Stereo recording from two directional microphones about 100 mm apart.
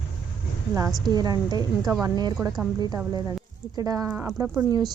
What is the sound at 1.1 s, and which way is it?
A woman's voice, 40° right (ahead or behind).